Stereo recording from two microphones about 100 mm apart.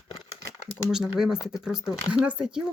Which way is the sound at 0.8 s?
5° right (ahead or behind).